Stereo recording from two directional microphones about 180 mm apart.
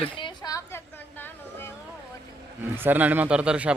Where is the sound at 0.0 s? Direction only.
25° left (ahead or behind).